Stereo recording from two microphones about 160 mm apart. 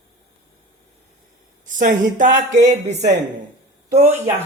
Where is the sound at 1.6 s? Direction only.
55° right (ahead or behind).